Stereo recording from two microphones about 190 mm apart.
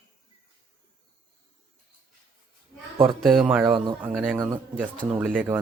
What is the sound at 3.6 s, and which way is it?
Speech, 25° right (ahead or behind).